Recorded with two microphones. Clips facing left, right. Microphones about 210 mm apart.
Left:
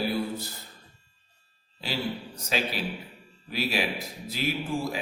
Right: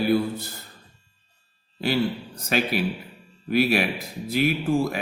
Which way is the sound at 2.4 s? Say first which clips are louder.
Right 6 dB; 60° right (ahead or behind).